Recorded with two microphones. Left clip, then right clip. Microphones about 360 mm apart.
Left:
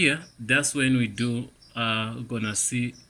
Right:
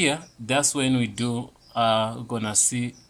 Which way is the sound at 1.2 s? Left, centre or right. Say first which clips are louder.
Right 1 dB; right.